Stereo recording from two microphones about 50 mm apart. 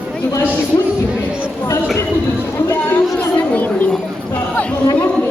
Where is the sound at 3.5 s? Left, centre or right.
Left.